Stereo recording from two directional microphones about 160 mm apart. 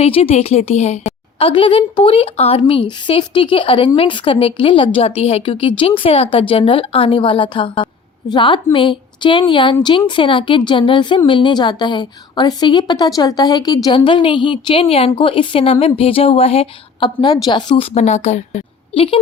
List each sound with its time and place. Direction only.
0.0 s a woman's voice: 40° left (ahead or behind)
18.9 s a woman's voice: 35° left (ahead or behind)